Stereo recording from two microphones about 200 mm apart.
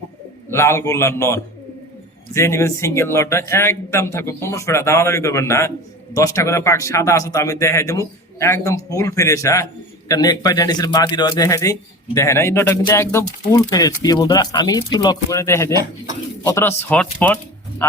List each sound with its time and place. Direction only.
0.5 s speech: 15° left (ahead or behind)